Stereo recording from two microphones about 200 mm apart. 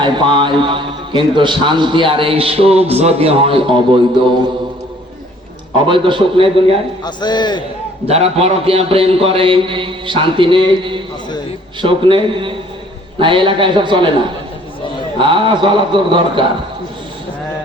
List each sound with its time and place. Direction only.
0.0 s a man's voice: 25° right (ahead or behind)
5.9 s a man's voice: 25° right (ahead or behind)
7.0 s a man's voice: 20° left (ahead or behind)
8.0 s a man's voice: 30° right (ahead or behind)
15.2 s a man's voice: 25° right (ahead or behind)